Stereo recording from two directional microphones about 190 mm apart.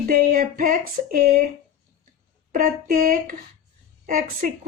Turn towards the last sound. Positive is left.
turn(degrees=-50)  # may be behind; listen again after turning